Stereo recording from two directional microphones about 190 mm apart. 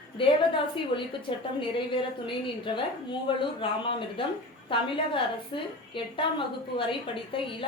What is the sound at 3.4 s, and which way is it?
A woman's voice, 25° left (ahead or behind).